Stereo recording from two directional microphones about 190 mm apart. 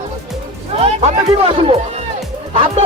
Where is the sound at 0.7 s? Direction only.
35° right (ahead or behind).